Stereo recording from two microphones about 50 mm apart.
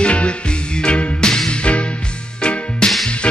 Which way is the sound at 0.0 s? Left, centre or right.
Left.